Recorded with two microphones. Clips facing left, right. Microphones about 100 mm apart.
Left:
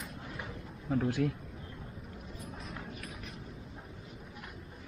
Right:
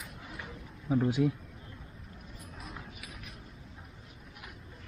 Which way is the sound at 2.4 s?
Centre (ahead or behind).